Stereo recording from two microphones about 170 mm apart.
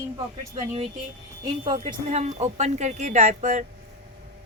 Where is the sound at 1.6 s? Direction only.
40° right (ahead or behind).